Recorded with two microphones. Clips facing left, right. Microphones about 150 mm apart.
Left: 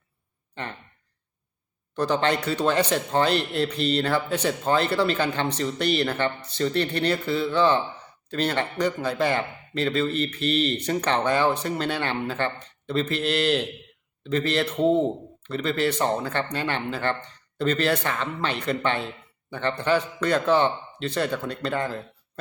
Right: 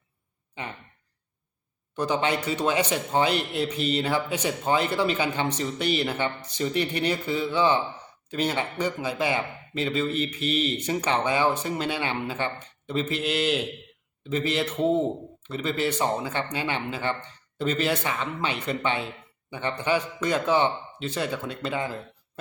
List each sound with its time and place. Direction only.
0.5 s speech: 10° right (ahead or behind)
2.0 s speech: 10° right (ahead or behind)